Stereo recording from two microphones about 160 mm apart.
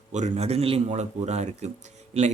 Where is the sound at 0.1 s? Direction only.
45° right (ahead or behind).